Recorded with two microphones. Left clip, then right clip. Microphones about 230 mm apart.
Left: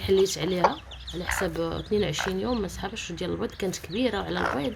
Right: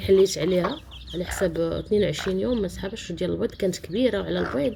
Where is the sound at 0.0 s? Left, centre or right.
Centre.